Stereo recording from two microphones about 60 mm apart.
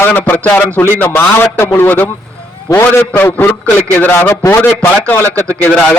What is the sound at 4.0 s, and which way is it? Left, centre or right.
Speech, left.